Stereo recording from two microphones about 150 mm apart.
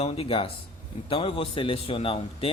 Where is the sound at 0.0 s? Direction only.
40° left (ahead or behind).